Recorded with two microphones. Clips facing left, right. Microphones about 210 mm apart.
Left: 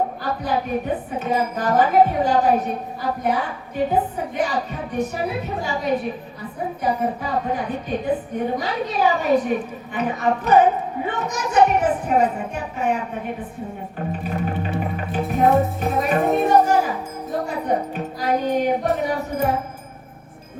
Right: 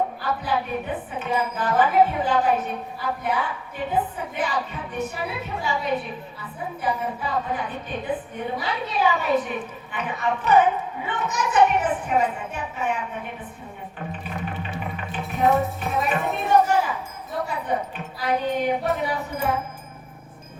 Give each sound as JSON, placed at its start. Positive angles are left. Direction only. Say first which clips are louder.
{"t": 0.2, "sound": "a woman's voice", "louder": "left 2 dB", "side_deg": 40}
{"t": 14.1, "sound": "music", "louder": "left 8 dB", "side_deg": 40}
{"t": 19.0, "sound": "a woman's voice", "louder": "left 4 dB", "side_deg": 40}